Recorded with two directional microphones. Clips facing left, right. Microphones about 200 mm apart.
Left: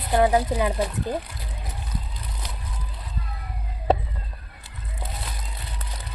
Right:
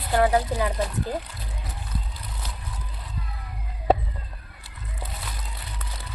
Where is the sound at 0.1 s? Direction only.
20° left (ahead or behind).